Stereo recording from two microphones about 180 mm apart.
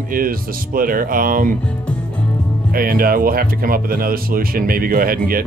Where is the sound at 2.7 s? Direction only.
55° right (ahead or behind).